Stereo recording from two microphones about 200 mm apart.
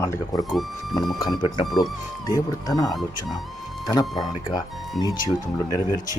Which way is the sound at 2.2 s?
20° left (ahead or behind).